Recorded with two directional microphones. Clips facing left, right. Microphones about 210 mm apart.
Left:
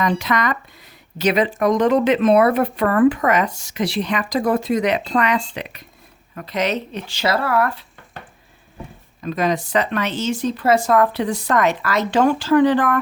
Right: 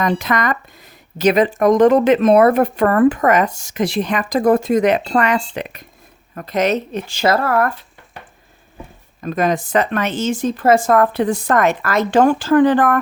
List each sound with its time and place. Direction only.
0.0 s speech: 50° right (ahead or behind)
9.2 s speech: 50° right (ahead or behind)